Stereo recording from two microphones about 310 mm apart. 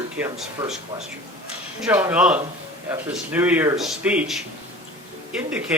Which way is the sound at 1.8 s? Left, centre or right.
Centre.